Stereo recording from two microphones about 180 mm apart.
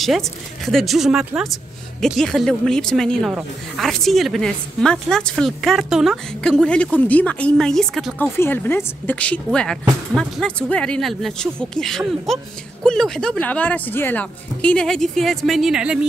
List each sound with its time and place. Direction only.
0.0 s speech: centre (ahead or behind)